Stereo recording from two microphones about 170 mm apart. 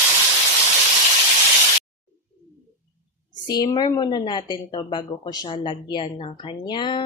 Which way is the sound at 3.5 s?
25° left (ahead or behind).